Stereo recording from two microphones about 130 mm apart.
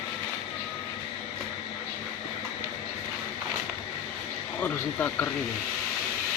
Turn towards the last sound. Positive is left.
turn(degrees=15)  # may be behind; listen again after turning